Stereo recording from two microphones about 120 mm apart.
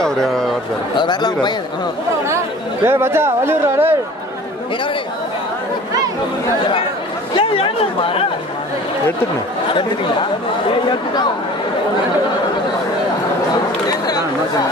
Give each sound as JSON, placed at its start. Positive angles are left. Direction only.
{"t": 0.0, "sound": "a man's voice", "side_deg": 5}
{"t": 0.9, "sound": "speech", "side_deg": 40}
{"t": 2.2, "sound": "speech", "side_deg": -20}
{"t": 7.3, "sound": "speech", "side_deg": 50}
{"t": 13.8, "sound": "chatter", "side_deg": 35}